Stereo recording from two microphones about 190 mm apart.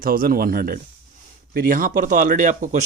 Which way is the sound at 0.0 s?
50° right (ahead or behind).